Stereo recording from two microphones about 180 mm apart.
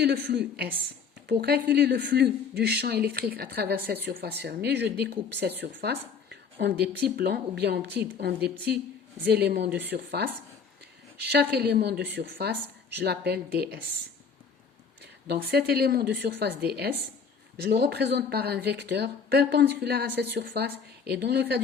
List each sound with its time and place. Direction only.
0.0 s a woman's voice: 70° right (ahead or behind)
15.3 s speech: 60° right (ahead or behind)